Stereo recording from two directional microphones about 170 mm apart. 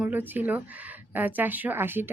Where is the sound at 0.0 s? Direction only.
10° right (ahead or behind).